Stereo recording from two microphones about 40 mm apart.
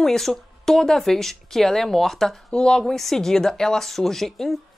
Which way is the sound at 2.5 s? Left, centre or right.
Left.